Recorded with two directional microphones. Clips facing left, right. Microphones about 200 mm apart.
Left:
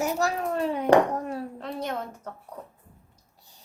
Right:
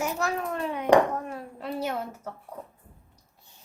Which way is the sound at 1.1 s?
35° left (ahead or behind).